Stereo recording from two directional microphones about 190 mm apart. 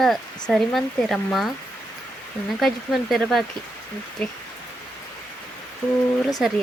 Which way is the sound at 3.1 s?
Centre (ahead or behind).